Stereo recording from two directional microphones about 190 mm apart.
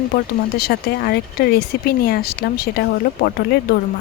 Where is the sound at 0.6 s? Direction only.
55° left (ahead or behind).